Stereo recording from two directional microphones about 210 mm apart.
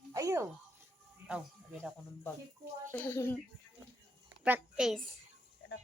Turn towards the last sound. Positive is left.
turn(degrees=-5)  # may be behind; listen again after turning